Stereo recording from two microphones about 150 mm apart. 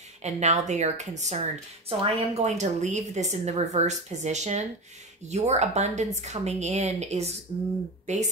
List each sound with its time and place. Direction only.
0.2 s a woman's voice: 50° right (ahead or behind)